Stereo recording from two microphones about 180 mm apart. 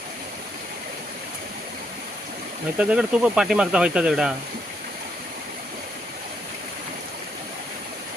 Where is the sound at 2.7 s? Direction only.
5° right (ahead or behind).